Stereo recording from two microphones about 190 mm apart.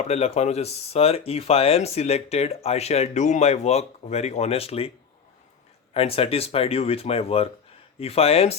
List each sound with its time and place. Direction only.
0.0 s speech: 35° left (ahead or behind)
5.9 s speech: 30° left (ahead or behind)